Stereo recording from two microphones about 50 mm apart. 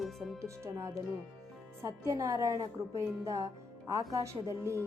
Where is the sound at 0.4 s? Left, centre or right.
Right.